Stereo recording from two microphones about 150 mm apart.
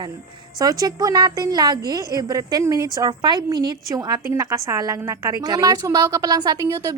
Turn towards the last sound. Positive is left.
turn(degrees=-25)  # may be behind; listen again after turning